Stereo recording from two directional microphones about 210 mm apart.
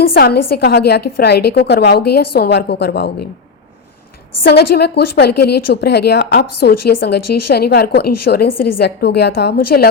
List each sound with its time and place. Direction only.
0.0 s a woman's voice: 45° left (ahead or behind)
4.4 s a woman's voice: 50° left (ahead or behind)